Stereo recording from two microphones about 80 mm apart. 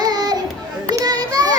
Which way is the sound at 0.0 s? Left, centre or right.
Right.